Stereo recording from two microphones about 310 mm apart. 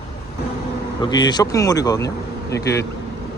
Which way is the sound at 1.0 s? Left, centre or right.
Centre.